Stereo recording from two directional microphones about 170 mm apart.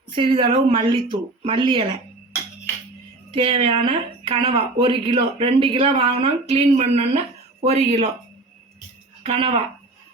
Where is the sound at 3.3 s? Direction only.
30° right (ahead or behind).